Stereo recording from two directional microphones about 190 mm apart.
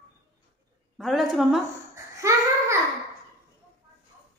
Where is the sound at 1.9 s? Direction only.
15° right (ahead or behind).